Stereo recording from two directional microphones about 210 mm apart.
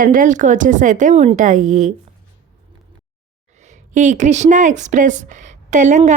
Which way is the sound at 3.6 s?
35° right (ahead or behind).